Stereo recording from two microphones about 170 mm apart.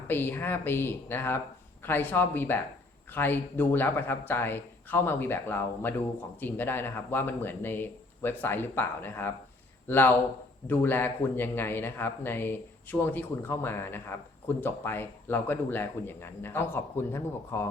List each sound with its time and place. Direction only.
0.1 s a man's voice: 10° left (ahead or behind)